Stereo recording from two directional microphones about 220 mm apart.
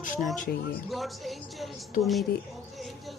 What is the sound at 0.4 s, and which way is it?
Speech, 45° left (ahead or behind).